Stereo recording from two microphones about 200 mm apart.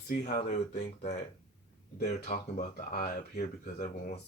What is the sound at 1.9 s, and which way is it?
Speech, 50° left (ahead or behind).